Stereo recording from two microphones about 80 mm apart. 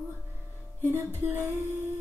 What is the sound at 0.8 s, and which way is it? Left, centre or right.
Music, right.